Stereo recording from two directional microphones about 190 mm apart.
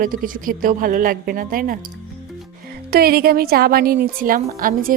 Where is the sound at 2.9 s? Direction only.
55° right (ahead or behind).